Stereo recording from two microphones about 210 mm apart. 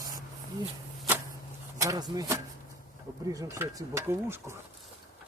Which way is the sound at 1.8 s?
15° right (ahead or behind).